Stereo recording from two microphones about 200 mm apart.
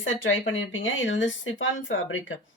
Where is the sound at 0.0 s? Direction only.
75° left (ahead or behind).